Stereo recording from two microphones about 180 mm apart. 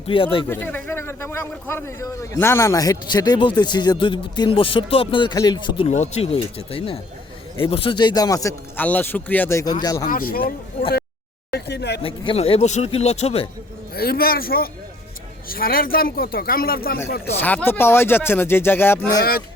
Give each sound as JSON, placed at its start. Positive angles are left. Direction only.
{"t": 0.1, "sound": "a man's voice", "side_deg": 30}
{"t": 0.4, "sound": "a man's voice", "side_deg": 10}
{"t": 10.1, "sound": "speech", "side_deg": 55}
{"t": 11.5, "sound": "speech", "side_deg": 70}
{"t": 12.0, "sound": "speech", "side_deg": 30}
{"t": 13.9, "sound": "speech", "side_deg": 55}
{"t": 17.3, "sound": "speech", "side_deg": 10}